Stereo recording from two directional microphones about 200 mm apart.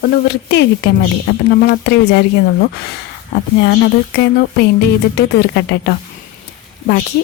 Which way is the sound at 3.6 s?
60° left (ahead or behind).